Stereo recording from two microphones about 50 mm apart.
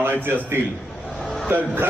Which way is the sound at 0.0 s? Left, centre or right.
Right.